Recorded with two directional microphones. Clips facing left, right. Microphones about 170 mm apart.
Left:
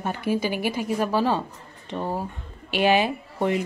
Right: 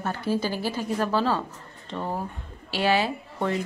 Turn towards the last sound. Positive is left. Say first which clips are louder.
# left 3 dB
turn(degrees=15)  # may be behind; listen again after turning